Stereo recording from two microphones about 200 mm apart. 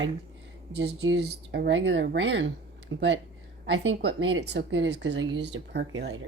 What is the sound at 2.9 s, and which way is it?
Speech, 80° right.